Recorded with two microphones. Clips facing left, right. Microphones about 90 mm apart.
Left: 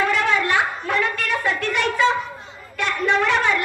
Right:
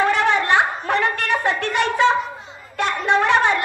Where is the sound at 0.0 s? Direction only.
25° right (ahead or behind).